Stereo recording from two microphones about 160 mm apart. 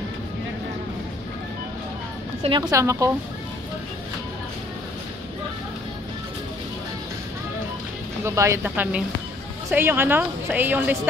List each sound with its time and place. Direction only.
2.4 s a woman's voice: 30° right (ahead or behind)
2.7 s a woman's voice: 20° right (ahead or behind)
8.2 s a woman's voice: 15° right (ahead or behind)